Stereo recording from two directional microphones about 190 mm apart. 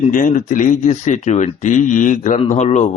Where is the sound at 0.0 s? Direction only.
45° left (ahead or behind).